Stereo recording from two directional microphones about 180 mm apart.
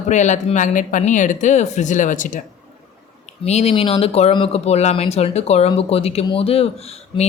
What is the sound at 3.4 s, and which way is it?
Speech, 35° left (ahead or behind).